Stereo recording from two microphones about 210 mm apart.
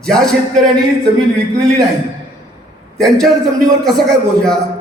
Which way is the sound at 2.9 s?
Centre (ahead or behind).